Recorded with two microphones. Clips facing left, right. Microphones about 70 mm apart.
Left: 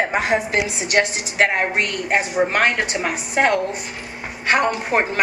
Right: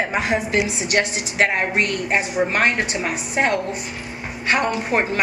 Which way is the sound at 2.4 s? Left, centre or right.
Left.